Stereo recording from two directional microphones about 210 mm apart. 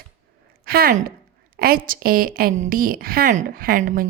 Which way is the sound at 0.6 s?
45° right (ahead or behind).